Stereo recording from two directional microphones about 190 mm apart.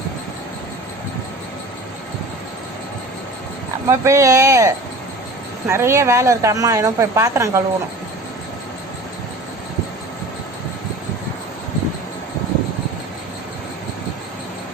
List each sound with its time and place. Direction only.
3.8 s speech: 15° right (ahead or behind)